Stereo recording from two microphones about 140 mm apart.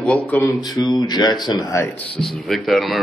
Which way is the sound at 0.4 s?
25° left (ahead or behind).